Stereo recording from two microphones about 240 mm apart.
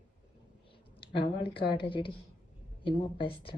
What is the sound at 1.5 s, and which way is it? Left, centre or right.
A woman's voice, left.